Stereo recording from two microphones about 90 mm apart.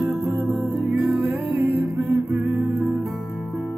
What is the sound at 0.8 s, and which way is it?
Music, 20° right (ahead or behind).